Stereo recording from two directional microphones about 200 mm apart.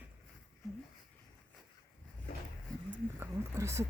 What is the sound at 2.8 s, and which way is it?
Speech, 15° right (ahead or behind).